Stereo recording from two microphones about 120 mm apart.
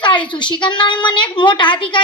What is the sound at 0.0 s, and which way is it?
A woman's voice, 40° left (ahead or behind).